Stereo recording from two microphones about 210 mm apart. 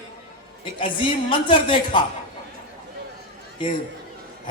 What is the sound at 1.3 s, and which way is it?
Speech, 25° left (ahead or behind).